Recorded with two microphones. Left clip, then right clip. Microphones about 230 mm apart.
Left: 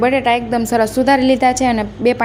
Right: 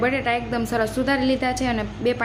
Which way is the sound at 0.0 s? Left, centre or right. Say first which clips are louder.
Left 8 dB; left.